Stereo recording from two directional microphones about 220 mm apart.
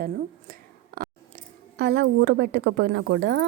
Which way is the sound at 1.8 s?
50° right (ahead or behind).